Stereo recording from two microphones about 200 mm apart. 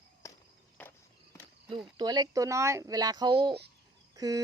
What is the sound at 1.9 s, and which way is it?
Speech, 20° right (ahead or behind).